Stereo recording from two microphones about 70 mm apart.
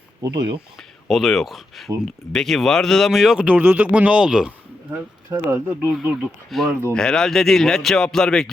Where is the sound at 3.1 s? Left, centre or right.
Centre.